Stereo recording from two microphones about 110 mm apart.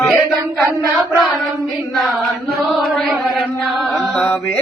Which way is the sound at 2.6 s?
Centre (ahead or behind).